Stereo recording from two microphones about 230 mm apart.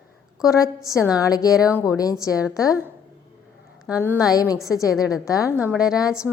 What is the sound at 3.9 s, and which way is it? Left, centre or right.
A woman's voice, centre.